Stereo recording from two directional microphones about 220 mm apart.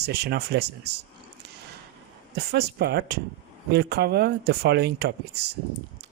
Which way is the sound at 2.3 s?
50° right (ahead or behind).